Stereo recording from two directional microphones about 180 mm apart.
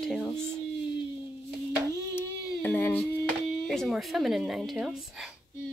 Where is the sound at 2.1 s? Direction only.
10° left (ahead or behind).